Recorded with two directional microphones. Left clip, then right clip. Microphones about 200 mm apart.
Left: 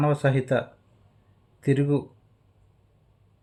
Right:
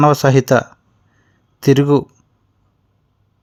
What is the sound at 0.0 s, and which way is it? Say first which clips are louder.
Speech: right 12 dB; 50° right (ahead or behind).